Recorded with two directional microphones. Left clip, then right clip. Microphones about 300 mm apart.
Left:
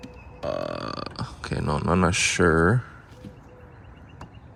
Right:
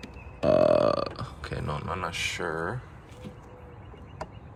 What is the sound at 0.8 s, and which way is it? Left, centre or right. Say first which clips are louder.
Burping: right 8 dB; centre.